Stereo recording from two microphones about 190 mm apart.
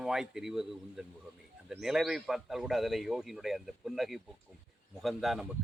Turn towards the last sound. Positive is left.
turn(degrees=0)  # may be behind; listen again after turning